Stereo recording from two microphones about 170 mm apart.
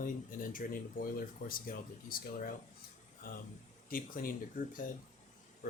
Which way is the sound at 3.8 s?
55° left (ahead or behind).